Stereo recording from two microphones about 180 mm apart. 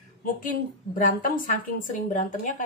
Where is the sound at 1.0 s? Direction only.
45° left (ahead or behind).